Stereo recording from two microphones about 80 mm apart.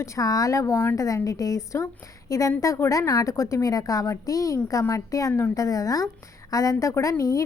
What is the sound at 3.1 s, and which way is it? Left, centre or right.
A woman's voice, left.